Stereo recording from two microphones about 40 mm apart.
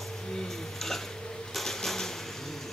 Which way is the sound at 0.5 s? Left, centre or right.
Centre.